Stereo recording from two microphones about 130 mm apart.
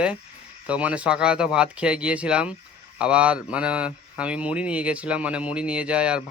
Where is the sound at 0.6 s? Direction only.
10° right (ahead or behind).